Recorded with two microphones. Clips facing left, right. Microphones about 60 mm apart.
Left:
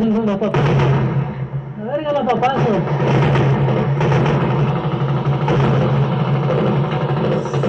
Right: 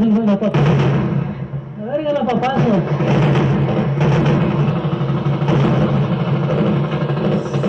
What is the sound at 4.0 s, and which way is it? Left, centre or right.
Music, centre.